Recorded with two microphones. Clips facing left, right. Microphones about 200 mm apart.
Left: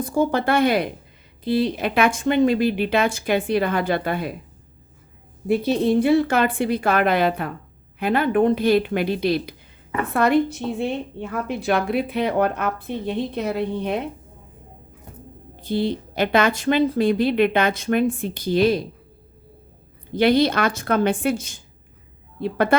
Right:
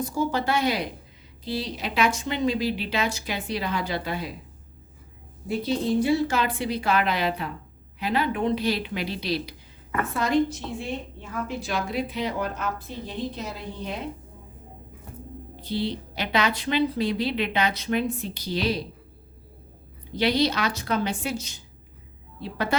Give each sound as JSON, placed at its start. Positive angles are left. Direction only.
{"t": 0.0, "sound": "a woman's voice", "side_deg": 55}
{"t": 5.5, "sound": "a woman's voice", "side_deg": 60}
{"t": 15.6, "sound": "a woman's voice", "side_deg": 50}
{"t": 20.1, "sound": "a woman's voice", "side_deg": 55}